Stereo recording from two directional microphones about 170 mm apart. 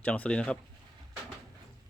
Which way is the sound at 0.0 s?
5° left (ahead or behind).